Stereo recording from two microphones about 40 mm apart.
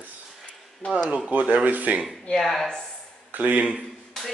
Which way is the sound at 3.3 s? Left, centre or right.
Right.